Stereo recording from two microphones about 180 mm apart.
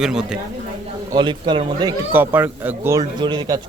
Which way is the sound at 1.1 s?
25° right (ahead or behind).